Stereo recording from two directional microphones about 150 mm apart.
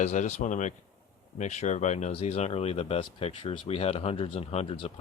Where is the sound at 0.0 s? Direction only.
55° left (ahead or behind).